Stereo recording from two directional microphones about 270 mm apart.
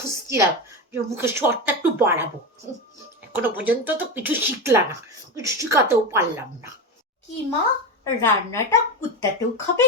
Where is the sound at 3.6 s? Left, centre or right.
Centre.